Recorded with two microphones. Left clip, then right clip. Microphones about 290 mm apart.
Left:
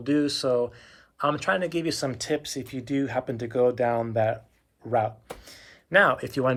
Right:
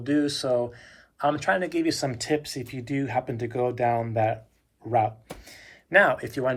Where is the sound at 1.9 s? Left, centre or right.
Centre.